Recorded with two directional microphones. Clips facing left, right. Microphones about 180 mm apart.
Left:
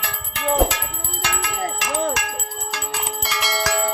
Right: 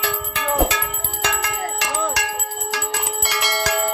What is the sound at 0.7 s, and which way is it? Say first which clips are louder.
Bell: right 3 dB; 55° right (ahead or behind).